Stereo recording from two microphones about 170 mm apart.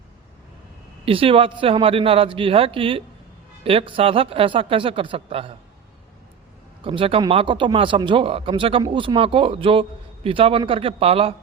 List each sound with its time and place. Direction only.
1.0 s speech: 30° right (ahead or behind)
6.8 s speech: 30° right (ahead or behind)